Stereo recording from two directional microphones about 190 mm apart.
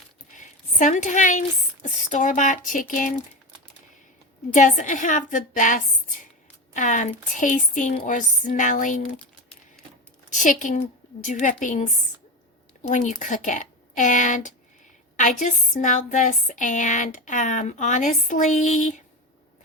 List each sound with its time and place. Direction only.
0.3 s a woman's voice: 40° left (ahead or behind)
4.5 s a woman's voice: 40° left (ahead or behind)
10.2 s a woman's voice: 40° left (ahead or behind)